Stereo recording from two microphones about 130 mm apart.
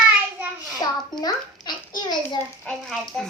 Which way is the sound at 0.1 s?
10° right (ahead or behind).